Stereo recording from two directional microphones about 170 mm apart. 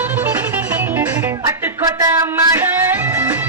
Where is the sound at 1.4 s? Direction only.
20° right (ahead or behind).